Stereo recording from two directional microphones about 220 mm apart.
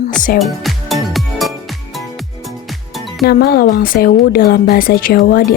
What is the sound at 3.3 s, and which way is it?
Speech, 45° left (ahead or behind).